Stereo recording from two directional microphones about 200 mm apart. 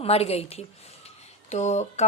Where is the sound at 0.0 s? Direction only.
30° left (ahead or behind).